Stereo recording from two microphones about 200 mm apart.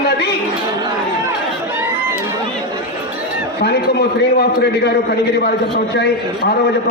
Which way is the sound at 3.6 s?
55° left (ahead or behind).